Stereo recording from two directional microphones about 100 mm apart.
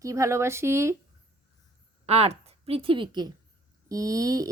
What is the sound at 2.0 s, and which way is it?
A woman's voice, 90° right.